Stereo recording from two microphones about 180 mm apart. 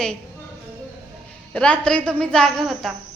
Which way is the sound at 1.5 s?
5° left (ahead or behind).